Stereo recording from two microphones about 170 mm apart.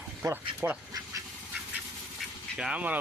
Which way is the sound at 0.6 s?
15° right (ahead or behind).